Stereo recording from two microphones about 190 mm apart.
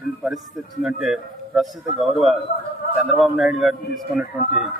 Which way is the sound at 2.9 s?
Centre (ahead or behind).